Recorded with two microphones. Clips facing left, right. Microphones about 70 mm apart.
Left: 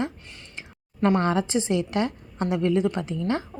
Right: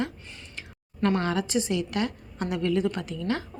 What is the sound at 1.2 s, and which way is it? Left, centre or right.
Speech, left.